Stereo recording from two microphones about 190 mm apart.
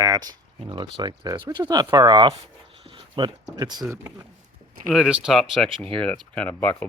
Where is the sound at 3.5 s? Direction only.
20° right (ahead or behind).